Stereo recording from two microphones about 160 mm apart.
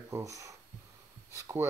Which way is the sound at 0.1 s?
20° right (ahead or behind).